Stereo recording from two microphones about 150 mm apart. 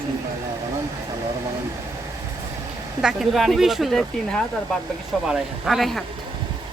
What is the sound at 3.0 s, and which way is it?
Speech, 5° right (ahead or behind).